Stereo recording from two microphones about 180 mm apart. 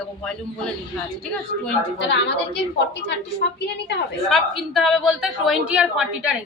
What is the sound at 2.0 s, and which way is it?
Speech, 75° left (ahead or behind).